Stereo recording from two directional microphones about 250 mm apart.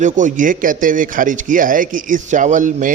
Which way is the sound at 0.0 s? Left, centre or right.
Right.